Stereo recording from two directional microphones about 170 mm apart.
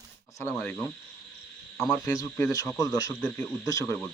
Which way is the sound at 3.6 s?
20° left (ahead or behind).